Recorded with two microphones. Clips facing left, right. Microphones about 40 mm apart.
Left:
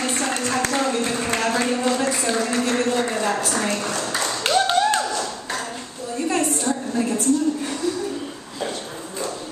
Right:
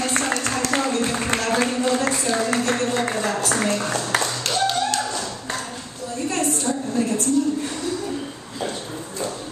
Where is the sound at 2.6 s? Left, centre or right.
Centre.